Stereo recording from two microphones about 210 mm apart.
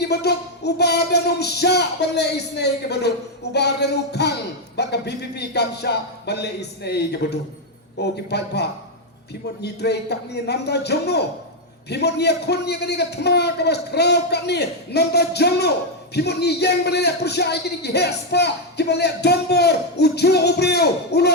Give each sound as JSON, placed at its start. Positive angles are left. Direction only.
{"t": 0.0, "sound": "a man's voice", "side_deg": 50}